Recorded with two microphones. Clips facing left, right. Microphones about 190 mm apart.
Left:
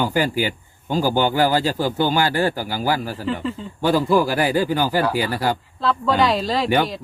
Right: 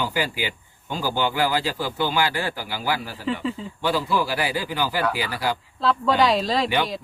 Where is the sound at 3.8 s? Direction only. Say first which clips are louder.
Left 6 dB; 45° left (ahead or behind).